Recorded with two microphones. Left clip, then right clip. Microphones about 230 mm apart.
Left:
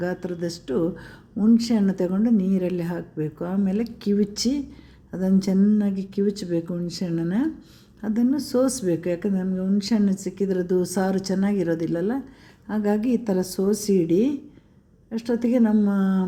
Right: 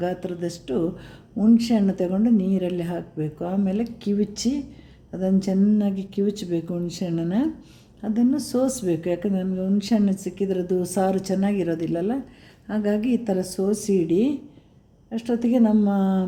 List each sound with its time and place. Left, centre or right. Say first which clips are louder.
0.0 s speech: right 1 dB; centre